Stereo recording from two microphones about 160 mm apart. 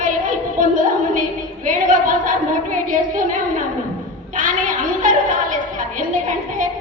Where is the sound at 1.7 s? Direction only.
55° right (ahead or behind).